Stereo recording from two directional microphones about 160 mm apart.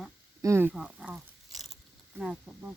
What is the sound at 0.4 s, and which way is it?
Speech, 15° right (ahead or behind).